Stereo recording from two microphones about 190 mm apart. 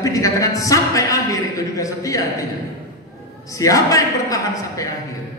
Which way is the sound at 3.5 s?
15° left (ahead or behind).